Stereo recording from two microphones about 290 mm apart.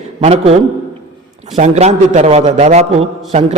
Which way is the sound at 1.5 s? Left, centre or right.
Right.